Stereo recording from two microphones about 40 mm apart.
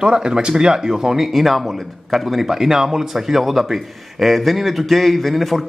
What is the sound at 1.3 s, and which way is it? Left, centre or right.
A man's voice, centre.